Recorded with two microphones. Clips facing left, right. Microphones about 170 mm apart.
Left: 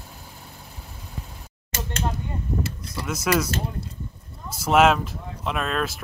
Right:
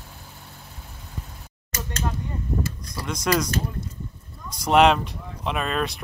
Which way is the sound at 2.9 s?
5° left (ahead or behind).